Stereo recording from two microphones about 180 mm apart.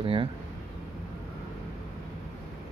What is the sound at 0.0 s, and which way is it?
Speech, 30° right (ahead or behind).